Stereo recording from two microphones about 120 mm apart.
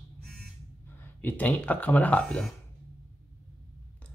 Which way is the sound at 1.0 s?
15° left (ahead or behind).